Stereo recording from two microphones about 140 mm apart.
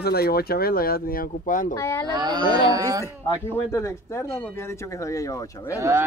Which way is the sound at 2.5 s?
35° left (ahead or behind).